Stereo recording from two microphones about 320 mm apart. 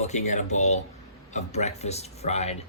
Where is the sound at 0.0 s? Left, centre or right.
Left.